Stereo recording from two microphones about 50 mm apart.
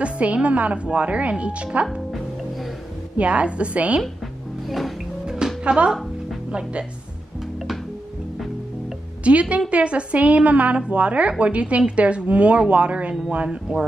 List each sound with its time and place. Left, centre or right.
0.0 s a woman's voice: right
3.2 s a woman's voice: right
4.6 s music: centre
5.2 s music: centre
5.6 s a woman's voice: centre
9.2 s a woman's voice: right